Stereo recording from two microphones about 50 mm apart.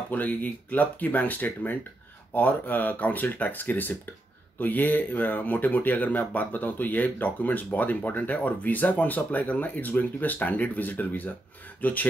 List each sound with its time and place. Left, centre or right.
0.1 s speech: left